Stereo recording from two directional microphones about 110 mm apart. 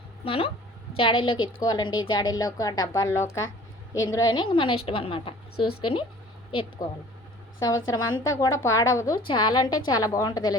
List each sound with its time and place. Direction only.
0.3 s a woman's voice: 60° left (ahead or behind); by 3.1 s 35° left (ahead or behind)
3.1 s a woman's voice: 25° left (ahead or behind)
4.4 s a woman's voice: 50° left (ahead or behind)
6.8 s a woman's voice: 35° left (ahead or behind)
9.2 s a woman's voice: 45° left (ahead or behind)